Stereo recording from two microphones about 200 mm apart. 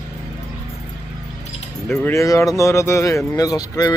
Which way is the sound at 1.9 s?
15° left (ahead or behind).